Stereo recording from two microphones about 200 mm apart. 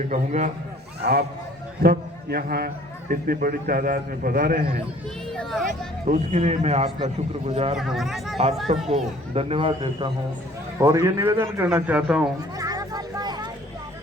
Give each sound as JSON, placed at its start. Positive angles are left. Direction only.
{"t": 0.1, "sound": "a man's voice", "side_deg": -35}
{"t": 1.8, "sound": "a man's voice", "side_deg": -50}
{"t": 5.3, "sound": "speech", "side_deg": 0}
{"t": 5.6, "sound": "a man's voice", "side_deg": -40}
{"t": 7.8, "sound": "speech", "side_deg": 0}
{"t": 8.7, "sound": "a man's voice", "side_deg": -35}
{"t": 10.8, "sound": "a man's voice", "side_deg": -15}
{"t": 12.5, "sound": "vehicle", "side_deg": -20}